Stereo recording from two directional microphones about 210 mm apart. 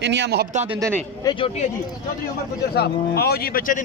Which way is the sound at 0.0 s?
55° right (ahead or behind).